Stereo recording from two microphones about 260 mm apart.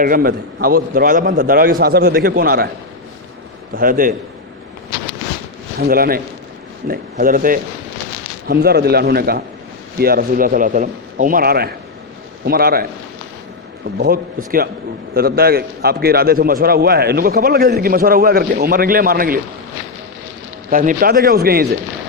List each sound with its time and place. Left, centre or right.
0.0 s a man's voice: right
3.8 s a man's voice: right
5.9 s a man's voice: right
14.0 s a man's voice: right
20.7 s a man's voice: right